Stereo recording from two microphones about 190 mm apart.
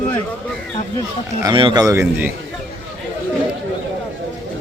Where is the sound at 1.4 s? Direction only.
25° right (ahead or behind).